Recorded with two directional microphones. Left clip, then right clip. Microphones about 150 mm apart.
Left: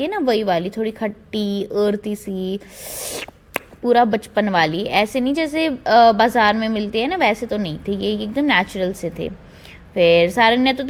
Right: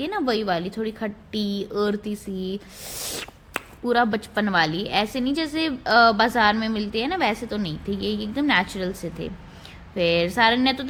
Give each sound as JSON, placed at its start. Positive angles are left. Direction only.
{"t": 0.0, "sound": "a woman's voice", "side_deg": 30}